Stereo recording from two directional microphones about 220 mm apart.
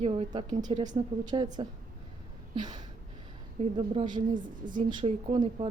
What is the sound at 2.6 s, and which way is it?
A woman's voice, 20° right (ahead or behind).